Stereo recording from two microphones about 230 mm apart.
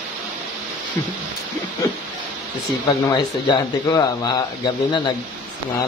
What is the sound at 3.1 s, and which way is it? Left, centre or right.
Speech, centre.